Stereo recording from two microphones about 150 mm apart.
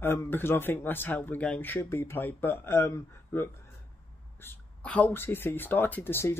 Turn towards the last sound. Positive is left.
turn(degrees=15)  # may be behind; listen again after turning